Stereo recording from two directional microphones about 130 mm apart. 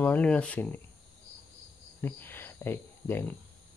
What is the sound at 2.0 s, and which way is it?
Cricket, 15° left (ahead or behind).